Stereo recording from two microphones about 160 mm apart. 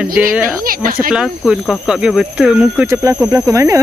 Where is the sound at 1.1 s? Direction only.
Centre (ahead or behind).